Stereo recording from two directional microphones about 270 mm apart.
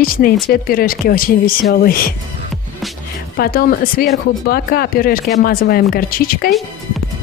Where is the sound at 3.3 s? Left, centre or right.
Left.